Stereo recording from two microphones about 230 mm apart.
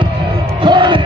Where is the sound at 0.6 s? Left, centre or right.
Right.